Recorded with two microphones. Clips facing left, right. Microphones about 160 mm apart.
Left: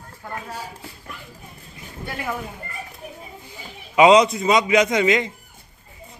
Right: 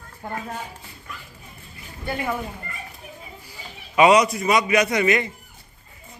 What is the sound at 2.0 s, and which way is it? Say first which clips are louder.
Speech: right 3 dB; centre (ahead or behind).